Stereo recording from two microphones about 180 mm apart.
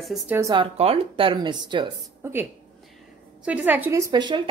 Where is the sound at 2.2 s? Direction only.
15° right (ahead or behind).